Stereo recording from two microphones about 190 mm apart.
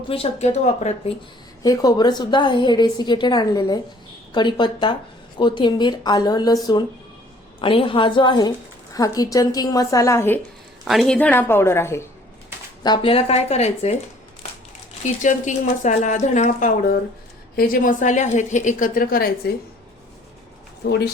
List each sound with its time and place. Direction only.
0.1 s a woman's voice: 35° left (ahead or behind)
1.6 s a woman's voice: 20° left (ahead or behind)
10.8 s a woman's voice: centre (ahead or behind)
12.8 s a woman's voice: 25° left (ahead or behind)
15.0 s a woman's voice: 40° left (ahead or behind)
20.8 s speech: 55° left (ahead or behind)